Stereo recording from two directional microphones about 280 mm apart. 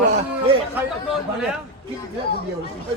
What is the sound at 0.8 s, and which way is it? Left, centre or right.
Speech, centre.